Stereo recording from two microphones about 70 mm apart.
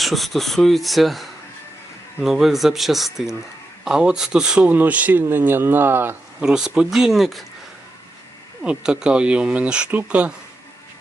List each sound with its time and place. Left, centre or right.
0.0 s speech: centre
4.7 s speech: right
6.4 s speech: centre
8.6 s speech: centre